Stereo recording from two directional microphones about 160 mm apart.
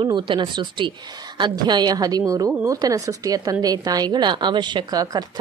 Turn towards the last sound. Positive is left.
turn(degrees=-25)  # may be behind; listen again after turning